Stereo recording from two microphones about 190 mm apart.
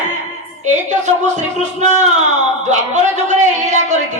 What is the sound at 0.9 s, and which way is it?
A woman's voice, 40° right (ahead or behind).